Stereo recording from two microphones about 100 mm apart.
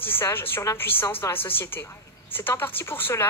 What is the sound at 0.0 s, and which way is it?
A woman's voice, 20° left (ahead or behind).